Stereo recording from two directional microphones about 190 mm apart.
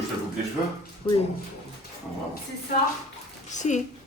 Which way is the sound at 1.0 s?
20° left (ahead or behind).